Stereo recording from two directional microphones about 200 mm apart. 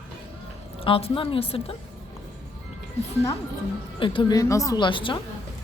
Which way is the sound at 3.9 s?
25° left (ahead or behind).